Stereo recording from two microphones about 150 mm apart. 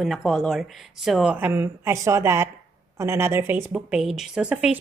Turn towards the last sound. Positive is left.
turn(degrees=-10)  # may be behind; listen again after turning